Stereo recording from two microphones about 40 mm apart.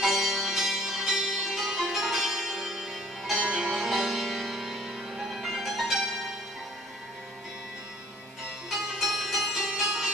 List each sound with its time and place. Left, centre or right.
0.0 s music: centre
3.4 s music: right
3.7 s music: centre
8.6 s music: centre